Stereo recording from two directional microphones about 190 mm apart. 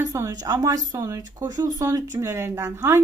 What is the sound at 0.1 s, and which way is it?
Speech, 15° right (ahead or behind).